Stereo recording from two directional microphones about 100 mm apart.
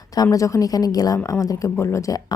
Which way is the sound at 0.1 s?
35° left (ahead or behind).